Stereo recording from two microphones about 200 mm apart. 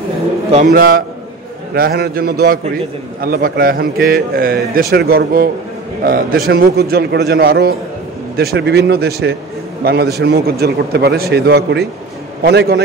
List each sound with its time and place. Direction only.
0.7 s a man's voice: 45° right (ahead or behind)